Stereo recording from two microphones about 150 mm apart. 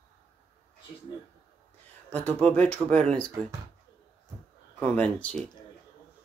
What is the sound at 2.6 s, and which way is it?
Speech, 10° left (ahead or behind).